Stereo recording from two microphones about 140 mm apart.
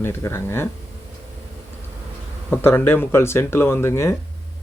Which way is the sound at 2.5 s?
15° left (ahead or behind).